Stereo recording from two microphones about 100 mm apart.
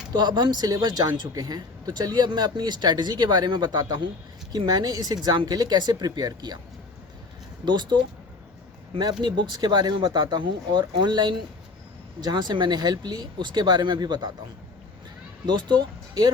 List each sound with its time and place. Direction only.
0.1 s speech: 45° right (ahead or behind)
7.6 s speech: 45° right (ahead or behind)
9.2 s speech: 45° right (ahead or behind)
15.4 s speech: 50° right (ahead or behind)